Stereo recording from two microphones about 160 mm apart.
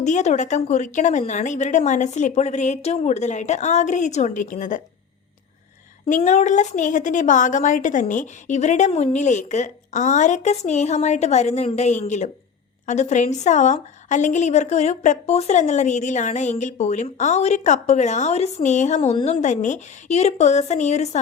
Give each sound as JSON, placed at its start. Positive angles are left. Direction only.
{"t": 0.0, "sound": "a woman's voice", "side_deg": 45}
{"t": 6.2, "sound": "a woman's voice", "side_deg": 50}